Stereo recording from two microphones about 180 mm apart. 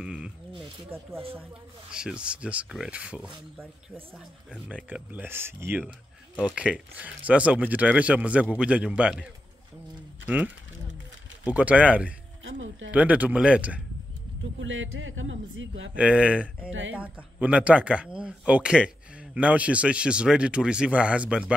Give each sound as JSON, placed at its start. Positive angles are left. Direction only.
{"t": 0.0, "sound": "speech", "side_deg": -5}
{"t": 12.4, "sound": "a man's voice", "side_deg": -90}
{"t": 12.9, "sound": "speech", "side_deg": -10}
{"t": 14.6, "sound": "a man's voice", "side_deg": -90}
{"t": 15.9, "sound": "speech", "side_deg": -5}